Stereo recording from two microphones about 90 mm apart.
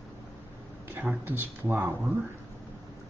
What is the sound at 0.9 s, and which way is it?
Speech, 20° right (ahead or behind).